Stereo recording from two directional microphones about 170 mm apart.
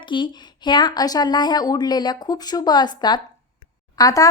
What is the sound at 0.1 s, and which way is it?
A woman's voice, 25° left (ahead or behind).